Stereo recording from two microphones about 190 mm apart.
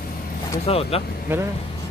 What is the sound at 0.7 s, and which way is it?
Speech, 30° left (ahead or behind).